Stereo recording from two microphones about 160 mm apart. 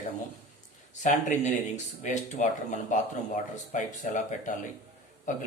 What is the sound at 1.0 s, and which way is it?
Speech, 45° left (ahead or behind).